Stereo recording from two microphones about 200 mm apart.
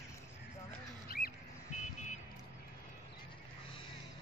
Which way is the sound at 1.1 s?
50° left (ahead or behind).